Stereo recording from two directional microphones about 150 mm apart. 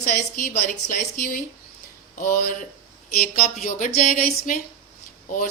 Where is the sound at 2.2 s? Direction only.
75° left (ahead or behind).